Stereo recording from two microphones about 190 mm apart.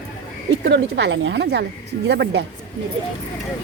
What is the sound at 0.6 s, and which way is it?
A woman's voice, 65° right (ahead or behind).